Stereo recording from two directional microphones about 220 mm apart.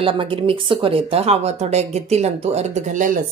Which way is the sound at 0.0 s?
25° right (ahead or behind).